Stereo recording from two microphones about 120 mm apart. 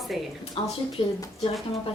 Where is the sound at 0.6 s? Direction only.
50° left (ahead or behind).